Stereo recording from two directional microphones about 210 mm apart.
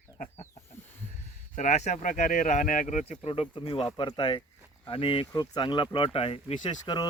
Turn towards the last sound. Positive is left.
turn(degrees=20)  # may be behind; listen again after turning